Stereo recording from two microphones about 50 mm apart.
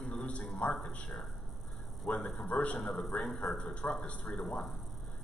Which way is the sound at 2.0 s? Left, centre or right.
Left.